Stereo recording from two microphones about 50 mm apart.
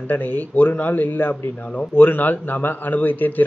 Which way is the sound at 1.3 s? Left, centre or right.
Left.